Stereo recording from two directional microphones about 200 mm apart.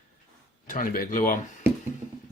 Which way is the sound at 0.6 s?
45° left (ahead or behind).